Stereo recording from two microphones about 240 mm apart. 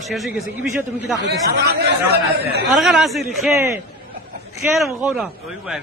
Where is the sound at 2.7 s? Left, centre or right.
Centre.